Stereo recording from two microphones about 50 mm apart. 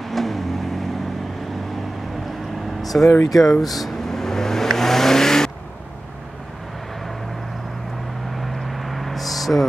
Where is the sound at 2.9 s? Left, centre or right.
Left.